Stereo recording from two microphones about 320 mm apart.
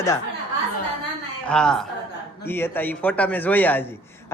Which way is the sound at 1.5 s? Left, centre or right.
Centre.